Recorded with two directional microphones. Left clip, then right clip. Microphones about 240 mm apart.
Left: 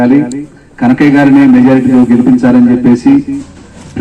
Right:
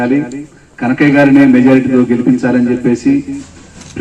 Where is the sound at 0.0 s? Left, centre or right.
Left.